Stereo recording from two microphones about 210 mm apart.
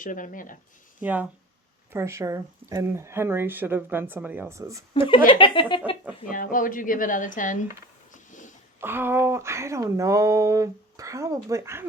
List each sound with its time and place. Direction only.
0.0 s speech: 40° left (ahead or behind)
1.0 s speech: 10° right (ahead or behind)
4.9 s speech: 25° left (ahead or behind)
6.3 s speech: 40° left (ahead or behind)
8.1 s a sound: 35° left (ahead or behind)
8.8 s speech: 10° right (ahead or behind)